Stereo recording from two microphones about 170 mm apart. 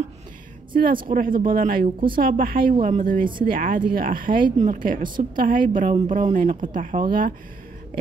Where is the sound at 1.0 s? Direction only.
55° right (ahead or behind).